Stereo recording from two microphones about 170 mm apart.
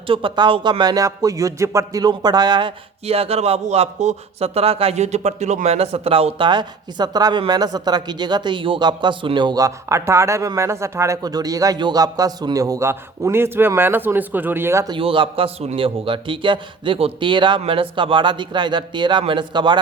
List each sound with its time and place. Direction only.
0.1 s speech: 30° right (ahead or behind)
14.9 s speech: 30° right (ahead or behind)